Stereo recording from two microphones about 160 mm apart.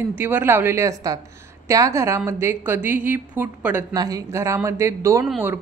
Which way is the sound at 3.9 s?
20° right (ahead or behind).